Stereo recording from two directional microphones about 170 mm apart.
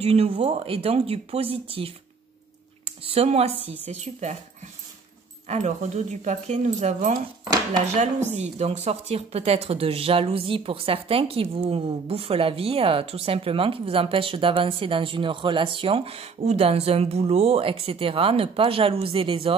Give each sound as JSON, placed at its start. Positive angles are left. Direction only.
{"t": 0.0, "sound": "speech", "side_deg": -35}
{"t": 3.0, "sound": "speech", "side_deg": -35}
{"t": 5.5, "sound": "speech", "side_deg": -45}